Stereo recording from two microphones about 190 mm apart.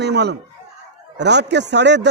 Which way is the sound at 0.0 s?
60° right (ahead or behind).